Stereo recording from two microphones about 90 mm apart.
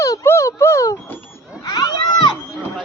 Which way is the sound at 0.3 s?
30° left (ahead or behind).